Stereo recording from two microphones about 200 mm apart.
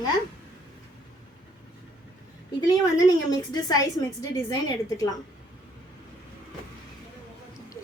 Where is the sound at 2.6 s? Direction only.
20° left (ahead or behind).